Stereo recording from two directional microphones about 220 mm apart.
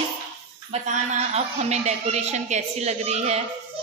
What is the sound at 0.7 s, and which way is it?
A woman's voice, 30° right (ahead or behind).